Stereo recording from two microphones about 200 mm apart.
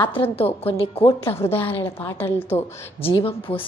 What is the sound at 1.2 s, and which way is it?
A woman's voice, 10° left (ahead or behind).